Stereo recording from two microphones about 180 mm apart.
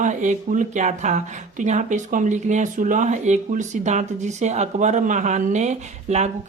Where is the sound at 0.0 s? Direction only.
45° right (ahead or behind).